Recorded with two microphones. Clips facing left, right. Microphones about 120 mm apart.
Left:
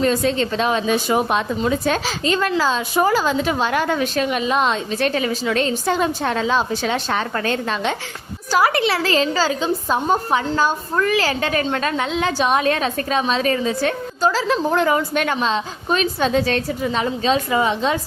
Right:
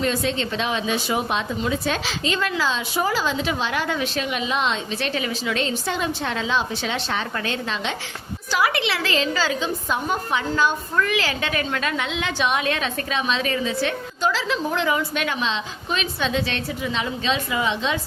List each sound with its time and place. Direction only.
0.0 s a woman's voice: 40° left (ahead or behind)